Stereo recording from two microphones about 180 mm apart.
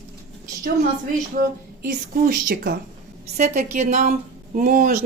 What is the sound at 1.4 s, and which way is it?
Speech, 50° right (ahead or behind).